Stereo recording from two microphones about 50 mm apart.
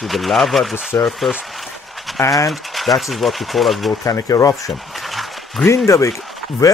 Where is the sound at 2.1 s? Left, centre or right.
Centre.